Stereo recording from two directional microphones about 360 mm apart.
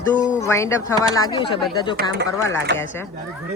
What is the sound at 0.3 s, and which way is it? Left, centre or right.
Speech, centre.